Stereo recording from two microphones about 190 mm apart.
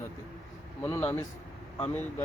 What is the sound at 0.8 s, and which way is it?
Speech, 15° left (ahead or behind).